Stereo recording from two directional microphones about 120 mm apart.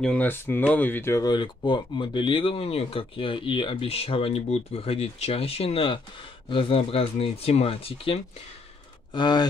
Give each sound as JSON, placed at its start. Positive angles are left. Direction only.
{"t": 0.0, "sound": "speech", "side_deg": 10}
{"t": 1.1, "sound": "speech", "side_deg": 35}
{"t": 9.1, "sound": "speech", "side_deg": 40}